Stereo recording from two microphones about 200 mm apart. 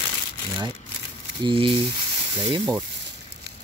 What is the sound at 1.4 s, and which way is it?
Speech, 25° right (ahead or behind).